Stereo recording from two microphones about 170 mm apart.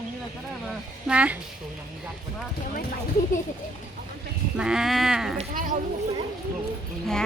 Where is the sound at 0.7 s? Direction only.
5° right (ahead or behind).